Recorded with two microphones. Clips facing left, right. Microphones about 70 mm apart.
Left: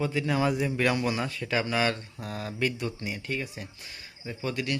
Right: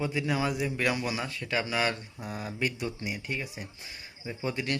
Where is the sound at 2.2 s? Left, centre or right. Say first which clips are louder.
Left 2 dB; centre.